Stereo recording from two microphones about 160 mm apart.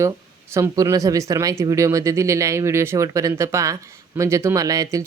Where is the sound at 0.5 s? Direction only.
15° right (ahead or behind).